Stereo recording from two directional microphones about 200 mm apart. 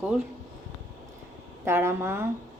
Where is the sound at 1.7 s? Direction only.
10° right (ahead or behind).